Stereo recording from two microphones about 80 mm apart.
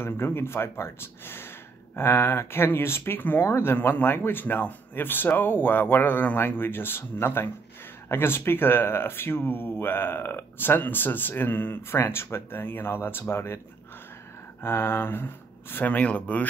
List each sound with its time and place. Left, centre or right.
0.0 s speech: left
14.6 s speech: left